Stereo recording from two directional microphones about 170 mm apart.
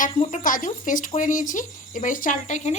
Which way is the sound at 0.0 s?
45° left (ahead or behind).